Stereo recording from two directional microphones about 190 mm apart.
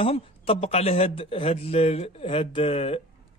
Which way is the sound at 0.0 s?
30° left (ahead or behind).